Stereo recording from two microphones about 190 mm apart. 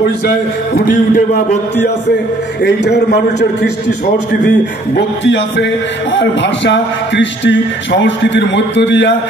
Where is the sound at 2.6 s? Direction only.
60° left (ahead or behind).